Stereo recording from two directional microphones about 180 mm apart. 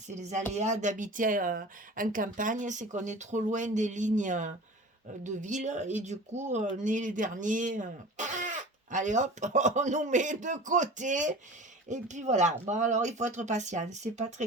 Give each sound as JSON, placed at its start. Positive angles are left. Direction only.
{"t": 0.1, "sound": "speech", "side_deg": -40}